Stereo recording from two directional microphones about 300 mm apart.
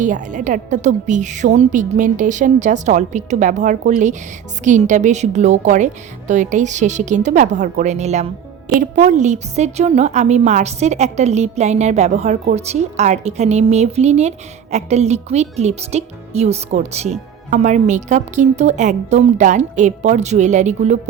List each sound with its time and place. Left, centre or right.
0.0 s a woman's voice: right